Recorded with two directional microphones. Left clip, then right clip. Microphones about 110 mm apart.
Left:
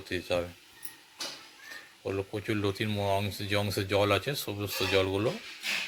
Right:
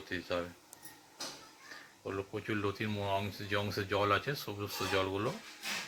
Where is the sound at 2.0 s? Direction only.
65° left (ahead or behind).